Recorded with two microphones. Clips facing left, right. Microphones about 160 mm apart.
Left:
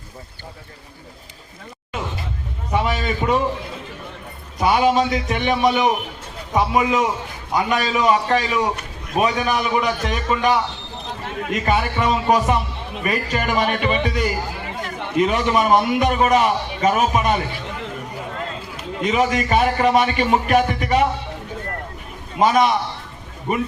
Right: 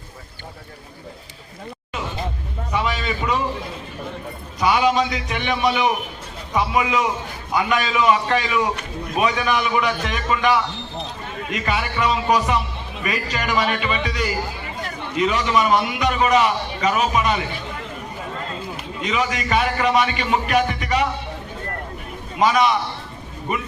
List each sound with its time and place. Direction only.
2.7 s a man's voice: 45° left (ahead or behind)
4.6 s a man's voice: 45° left (ahead or behind)
11.6 s a man's voice: 45° left (ahead or behind)
19.0 s a man's voice: 45° left (ahead or behind)
22.4 s a man's voice: 45° left (ahead or behind)